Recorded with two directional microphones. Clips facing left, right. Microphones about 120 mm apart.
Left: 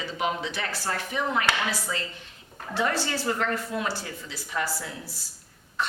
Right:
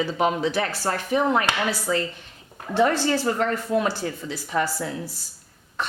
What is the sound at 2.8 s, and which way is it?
Speech, 30° right (ahead or behind).